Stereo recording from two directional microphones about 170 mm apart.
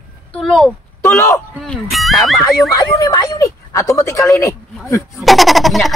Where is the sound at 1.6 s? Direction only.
Centre (ahead or behind).